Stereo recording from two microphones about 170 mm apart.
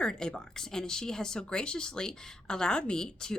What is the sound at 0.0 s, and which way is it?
Speech, 5° left (ahead or behind).